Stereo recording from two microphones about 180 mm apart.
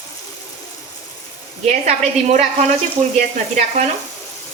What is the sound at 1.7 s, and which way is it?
A woman's voice, 40° right (ahead or behind).